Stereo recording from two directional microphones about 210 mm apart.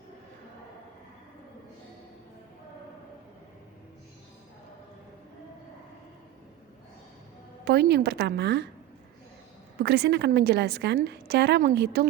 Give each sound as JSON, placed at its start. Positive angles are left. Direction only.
{"t": 7.6, "sound": "a woman's voice", "side_deg": -50}
{"t": 9.8, "sound": "a woman's voice", "side_deg": -50}